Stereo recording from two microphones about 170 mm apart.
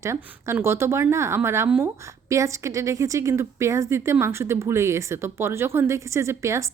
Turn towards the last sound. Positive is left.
turn(degrees=-15)  # may be behind; listen again after turning